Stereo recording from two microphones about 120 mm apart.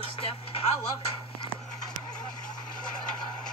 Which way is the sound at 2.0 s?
35° left (ahead or behind).